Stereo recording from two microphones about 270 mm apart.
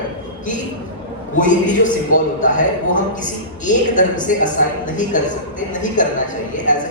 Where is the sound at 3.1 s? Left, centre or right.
Left.